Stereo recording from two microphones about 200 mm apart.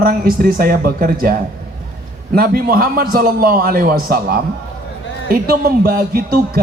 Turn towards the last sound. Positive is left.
turn(degrees=-50)  # may be behind; listen again after turning